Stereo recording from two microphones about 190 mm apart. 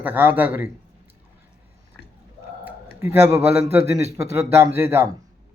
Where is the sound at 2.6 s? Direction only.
10° right (ahead or behind).